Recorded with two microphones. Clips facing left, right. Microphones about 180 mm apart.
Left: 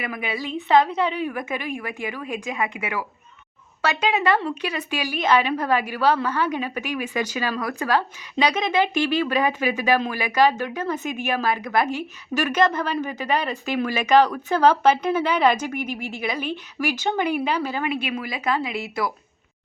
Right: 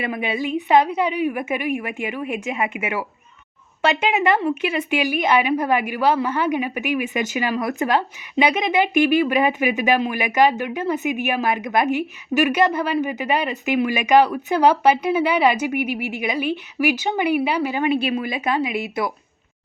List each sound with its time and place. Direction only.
0.0 s speech: 25° right (ahead or behind)
17.8 s speech: 30° right (ahead or behind)